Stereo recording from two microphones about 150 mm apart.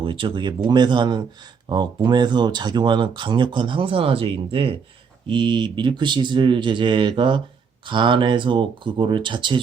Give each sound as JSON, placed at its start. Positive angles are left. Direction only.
{"t": 0.0, "sound": "speech", "side_deg": -35}